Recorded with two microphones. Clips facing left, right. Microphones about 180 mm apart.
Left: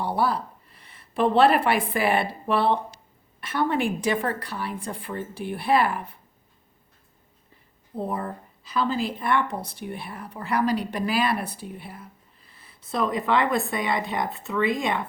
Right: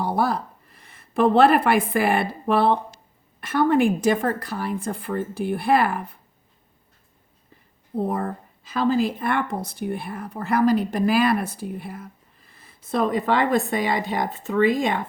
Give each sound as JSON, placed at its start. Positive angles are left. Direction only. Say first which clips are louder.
{"t": 0.0, "sound": "a sound", "louder": "right 2 dB", "side_deg": -45}
{"t": 0.8, "sound": "a woman's voice", "louder": "right 3 dB", "side_deg": -50}
{"t": 7.9, "sound": "speech", "louder": "right 4 dB", "side_deg": -50}